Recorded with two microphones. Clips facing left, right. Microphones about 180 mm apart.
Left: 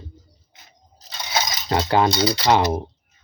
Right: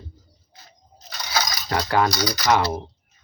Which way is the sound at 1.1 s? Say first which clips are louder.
Left 1 dB; 25° left (ahead or behind).